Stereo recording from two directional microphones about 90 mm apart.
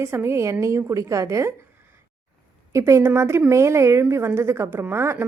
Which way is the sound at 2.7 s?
30° right (ahead or behind).